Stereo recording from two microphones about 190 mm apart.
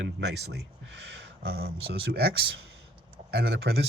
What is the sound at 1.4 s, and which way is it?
Speech, 55° right (ahead or behind).